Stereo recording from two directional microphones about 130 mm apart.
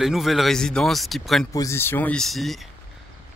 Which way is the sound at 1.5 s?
25° left (ahead or behind).